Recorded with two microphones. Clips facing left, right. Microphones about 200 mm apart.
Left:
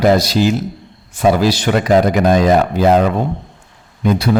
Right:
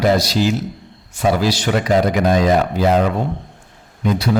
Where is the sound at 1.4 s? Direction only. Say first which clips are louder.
Left 3 dB; 55° left (ahead or behind).